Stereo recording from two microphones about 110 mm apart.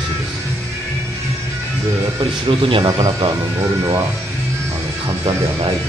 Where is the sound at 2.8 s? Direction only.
35° right (ahead or behind).